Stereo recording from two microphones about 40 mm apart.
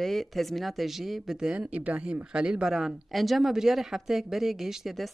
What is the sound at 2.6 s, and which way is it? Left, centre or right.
Speech, centre.